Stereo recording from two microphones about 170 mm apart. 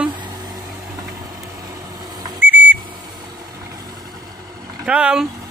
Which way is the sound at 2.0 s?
25° right (ahead or behind).